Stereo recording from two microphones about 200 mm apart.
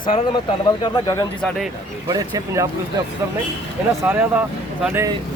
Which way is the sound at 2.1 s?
20° right (ahead or behind).